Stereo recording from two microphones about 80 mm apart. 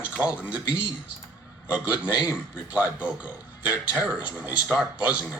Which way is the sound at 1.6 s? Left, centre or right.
Centre.